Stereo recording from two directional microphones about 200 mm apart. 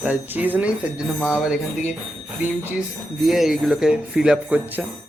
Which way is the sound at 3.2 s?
Centre (ahead or behind).